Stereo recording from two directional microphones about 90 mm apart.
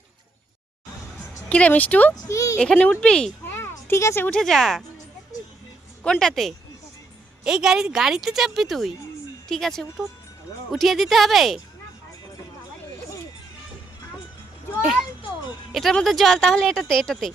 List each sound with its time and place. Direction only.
1.5 s speech: 15° left (ahead or behind)
2.2 s speech: 40° left (ahead or behind)
2.6 s speech: 10° left (ahead or behind)
3.4 s a sound: 25° left (ahead or behind)
4.3 s speech: 5° left (ahead or behind)
6.0 s speech: 10° left (ahead or behind)
14.8 s a child's voice: 5° right (ahead or behind)